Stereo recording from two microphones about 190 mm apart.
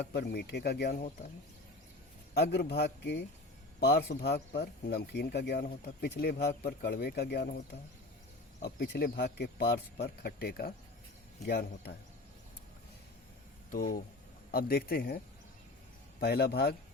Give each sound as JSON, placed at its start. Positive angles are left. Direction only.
{"t": 0.0, "sound": "speech", "side_deg": 60}
{"t": 2.3, "sound": "a man's voice", "side_deg": 60}
{"t": 8.6, "sound": "speech", "side_deg": 60}
{"t": 13.7, "sound": "speech", "side_deg": 45}
{"t": 16.2, "sound": "speech", "side_deg": 55}